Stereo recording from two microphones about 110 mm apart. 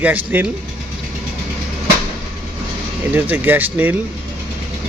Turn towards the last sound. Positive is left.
turn(degrees=-15)  # may be behind; listen again after turning